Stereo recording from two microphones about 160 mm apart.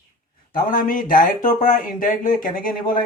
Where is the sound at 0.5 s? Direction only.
60° left (ahead or behind).